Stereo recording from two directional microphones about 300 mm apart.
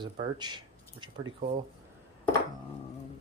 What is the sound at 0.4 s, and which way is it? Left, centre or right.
Speech, centre.